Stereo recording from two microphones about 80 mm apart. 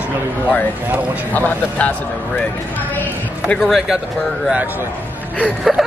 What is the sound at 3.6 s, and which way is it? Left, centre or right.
Speech, centre.